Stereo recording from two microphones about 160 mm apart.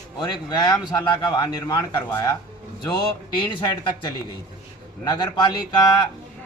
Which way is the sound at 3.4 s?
30° left (ahead or behind).